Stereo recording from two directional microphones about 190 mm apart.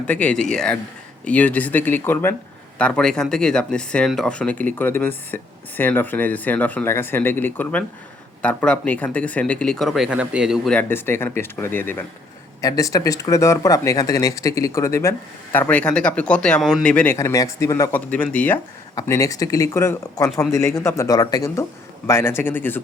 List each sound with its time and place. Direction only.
0.1 s speech: 5° left (ahead or behind)